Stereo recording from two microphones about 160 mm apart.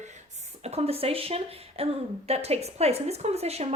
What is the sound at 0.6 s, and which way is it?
A woman's voice, 40° right (ahead or behind).